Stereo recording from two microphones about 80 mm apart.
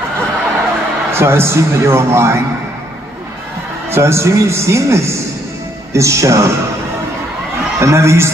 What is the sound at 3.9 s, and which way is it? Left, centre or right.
A man's voice, right.